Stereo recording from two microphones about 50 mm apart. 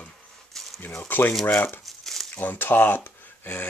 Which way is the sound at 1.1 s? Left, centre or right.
Left.